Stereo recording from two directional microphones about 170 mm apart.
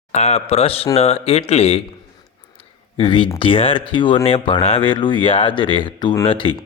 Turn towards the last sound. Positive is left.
turn(degrees=30)  # may be behind; listen again after turning